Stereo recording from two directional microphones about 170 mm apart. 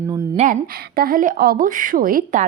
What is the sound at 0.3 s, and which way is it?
Speech, 50° right (ahead or behind).